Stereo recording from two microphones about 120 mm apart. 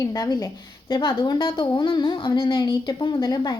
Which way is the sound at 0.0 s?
30° left (ahead or behind).